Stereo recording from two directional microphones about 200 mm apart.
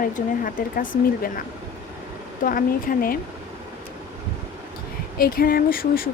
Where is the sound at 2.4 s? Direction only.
45° left (ahead or behind).